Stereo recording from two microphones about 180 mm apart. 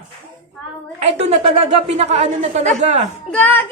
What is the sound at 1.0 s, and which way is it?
Speech, 35° right (ahead or behind).